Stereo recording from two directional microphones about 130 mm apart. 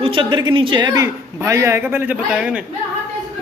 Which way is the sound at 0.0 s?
40° right (ahead or behind).